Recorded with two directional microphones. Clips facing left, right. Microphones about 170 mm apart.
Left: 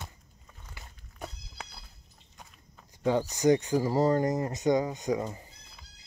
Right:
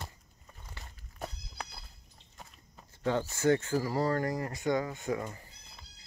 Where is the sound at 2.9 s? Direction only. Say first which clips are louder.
Left 4 dB; 15° left (ahead or behind).